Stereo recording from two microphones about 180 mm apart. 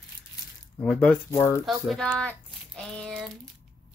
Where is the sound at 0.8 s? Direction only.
5° left (ahead or behind).